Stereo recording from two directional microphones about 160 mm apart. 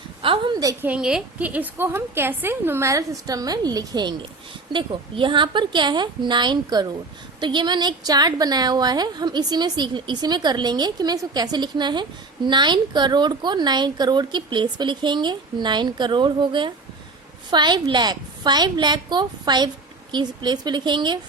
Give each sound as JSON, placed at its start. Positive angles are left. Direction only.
{"t": 0.2, "sound": "a woman's voice", "side_deg": -30}
{"t": 0.9, "sound": "a woman's voice", "side_deg": -5}